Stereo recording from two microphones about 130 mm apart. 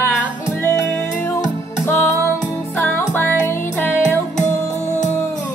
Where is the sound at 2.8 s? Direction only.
15° left (ahead or behind).